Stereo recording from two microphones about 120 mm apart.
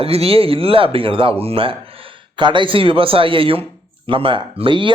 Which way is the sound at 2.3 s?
40° right (ahead or behind).